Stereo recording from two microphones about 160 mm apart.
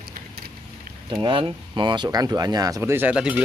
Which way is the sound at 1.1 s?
30° right (ahead or behind).